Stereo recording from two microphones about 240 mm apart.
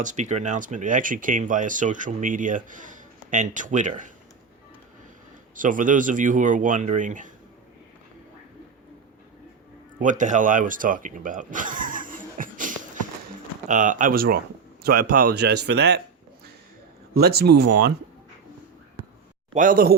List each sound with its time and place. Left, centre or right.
0.0 s speech: right
5.5 s speech: right
10.0 s speech: right
17.2 s speech: right
19.5 s speech: right